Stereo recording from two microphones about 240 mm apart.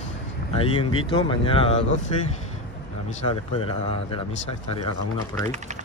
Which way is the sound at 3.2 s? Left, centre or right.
Left.